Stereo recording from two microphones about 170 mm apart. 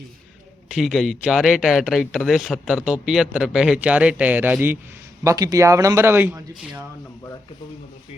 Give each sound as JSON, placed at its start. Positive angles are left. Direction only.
{"t": 0.7, "sound": "speech", "side_deg": 0}